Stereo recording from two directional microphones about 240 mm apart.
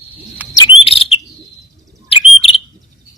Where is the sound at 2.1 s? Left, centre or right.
Left.